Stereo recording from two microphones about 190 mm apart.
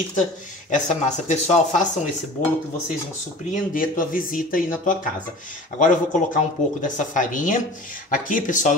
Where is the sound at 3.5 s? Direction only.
45° left (ahead or behind).